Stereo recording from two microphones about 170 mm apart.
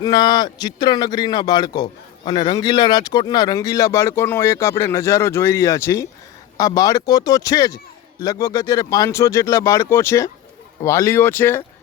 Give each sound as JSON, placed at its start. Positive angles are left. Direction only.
{"t": 0.0, "sound": "a man's voice", "side_deg": 25}